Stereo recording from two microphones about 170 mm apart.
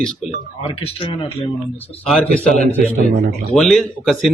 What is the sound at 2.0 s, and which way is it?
A man's voice, 5° left (ahead or behind).